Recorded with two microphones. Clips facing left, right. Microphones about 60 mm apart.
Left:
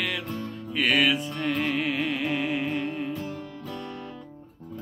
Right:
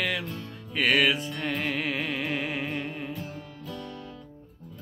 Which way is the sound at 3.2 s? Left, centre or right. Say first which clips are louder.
Left 4 dB; left.